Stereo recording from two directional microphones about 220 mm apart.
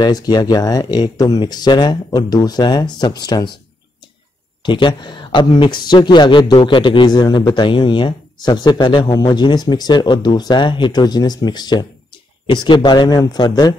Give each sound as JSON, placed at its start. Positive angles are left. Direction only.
{"t": 0.0, "sound": "speech", "side_deg": 20}
{"t": 4.6, "sound": "speech", "side_deg": 20}